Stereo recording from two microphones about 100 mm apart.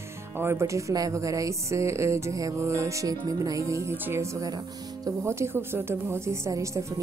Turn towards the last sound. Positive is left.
turn(degrees=-30)  # may be behind; listen again after turning